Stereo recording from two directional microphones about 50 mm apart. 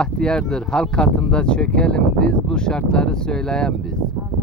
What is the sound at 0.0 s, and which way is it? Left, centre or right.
Speech, centre.